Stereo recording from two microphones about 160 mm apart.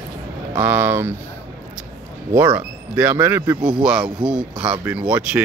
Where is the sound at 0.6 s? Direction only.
10° right (ahead or behind).